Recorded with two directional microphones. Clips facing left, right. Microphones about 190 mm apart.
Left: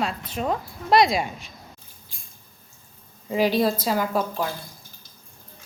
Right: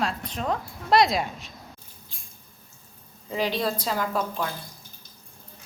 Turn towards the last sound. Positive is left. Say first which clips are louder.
# left 3 dB
turn(degrees=10)  # may be behind; listen again after turning